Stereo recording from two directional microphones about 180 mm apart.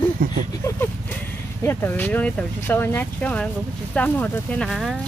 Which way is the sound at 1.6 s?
10° left (ahead or behind).